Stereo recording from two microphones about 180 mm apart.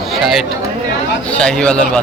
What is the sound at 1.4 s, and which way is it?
Speech, 5° left (ahead or behind).